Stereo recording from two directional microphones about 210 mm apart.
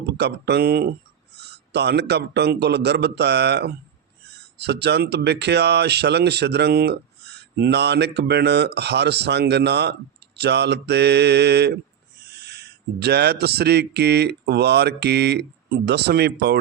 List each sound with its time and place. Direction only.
0.0 s speech: 50° right (ahead or behind)